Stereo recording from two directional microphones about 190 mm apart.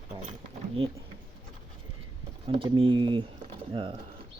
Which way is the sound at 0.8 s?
30° right (ahead or behind).